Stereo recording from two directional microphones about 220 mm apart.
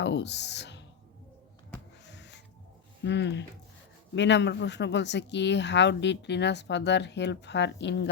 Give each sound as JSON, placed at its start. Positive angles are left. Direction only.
{"t": 0.0, "sound": "speech", "side_deg": 50}
{"t": 2.0, "sound": "a sound", "side_deg": 50}
{"t": 3.0, "sound": "speech", "side_deg": 50}